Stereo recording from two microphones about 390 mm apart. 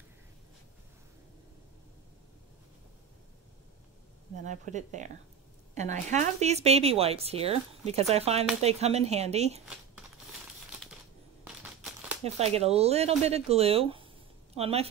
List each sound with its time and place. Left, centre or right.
4.5 s speech: centre
11.4 s a sound: centre
12.4 s a woman's voice: centre